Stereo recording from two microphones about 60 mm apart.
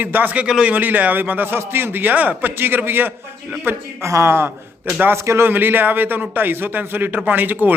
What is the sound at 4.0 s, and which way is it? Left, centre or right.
A man's voice, right.